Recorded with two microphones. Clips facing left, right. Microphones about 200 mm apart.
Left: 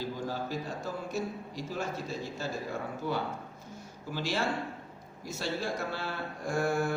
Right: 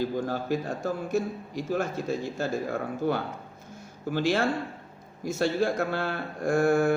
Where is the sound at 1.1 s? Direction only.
55° right (ahead or behind).